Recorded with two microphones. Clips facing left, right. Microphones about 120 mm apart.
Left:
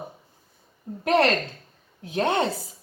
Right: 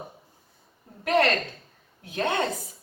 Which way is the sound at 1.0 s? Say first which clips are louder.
Left 2 dB; 30° left (ahead or behind).